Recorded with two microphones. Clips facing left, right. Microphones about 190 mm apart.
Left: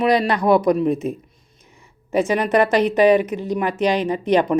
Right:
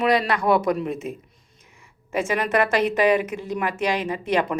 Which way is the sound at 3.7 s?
20° left (ahead or behind).